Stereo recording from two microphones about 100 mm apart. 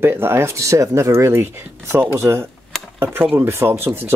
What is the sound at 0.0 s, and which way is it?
Speech, 25° right (ahead or behind).